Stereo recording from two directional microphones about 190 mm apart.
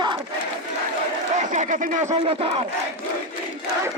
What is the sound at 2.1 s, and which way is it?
Speech, 30° right (ahead or behind).